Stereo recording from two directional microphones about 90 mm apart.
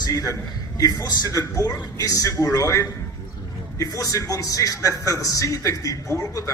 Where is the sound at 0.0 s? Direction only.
40° left (ahead or behind).